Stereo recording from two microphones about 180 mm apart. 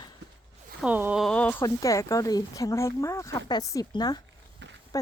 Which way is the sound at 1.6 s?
20° left (ahead or behind).